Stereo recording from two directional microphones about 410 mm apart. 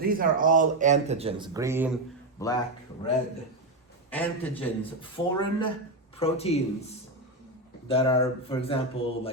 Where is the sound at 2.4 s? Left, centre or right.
Centre.